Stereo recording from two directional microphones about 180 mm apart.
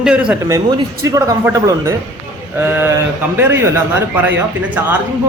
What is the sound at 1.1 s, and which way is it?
A man's voice, 20° right (ahead or behind).